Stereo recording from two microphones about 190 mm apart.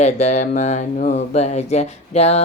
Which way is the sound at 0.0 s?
35° left (ahead or behind).